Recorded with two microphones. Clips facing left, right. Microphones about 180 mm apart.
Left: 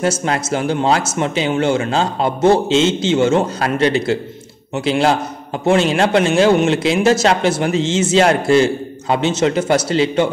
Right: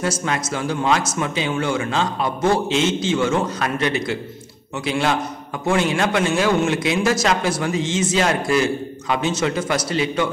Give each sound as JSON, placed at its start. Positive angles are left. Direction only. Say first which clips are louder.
{"t": 0.0, "sound": "a man's voice", "louder": "left 5 dB", "side_deg": 30}